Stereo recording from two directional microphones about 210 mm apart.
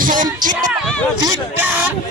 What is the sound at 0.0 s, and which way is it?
Music, 40° right (ahead or behind).